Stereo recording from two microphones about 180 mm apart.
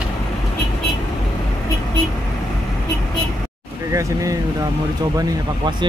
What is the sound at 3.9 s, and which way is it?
Speech, 15° right (ahead or behind).